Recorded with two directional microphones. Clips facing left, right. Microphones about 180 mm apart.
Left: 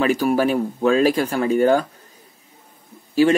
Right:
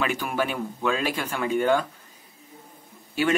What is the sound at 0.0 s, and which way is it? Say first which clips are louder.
Speech: left 9 dB; 35° left (ahead or behind).